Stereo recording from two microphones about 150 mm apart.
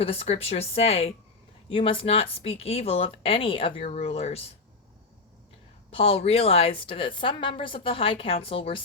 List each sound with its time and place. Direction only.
0.0 s a woman's voice: 40° left (ahead or behind)
5.9 s a woman's voice: 40° left (ahead or behind)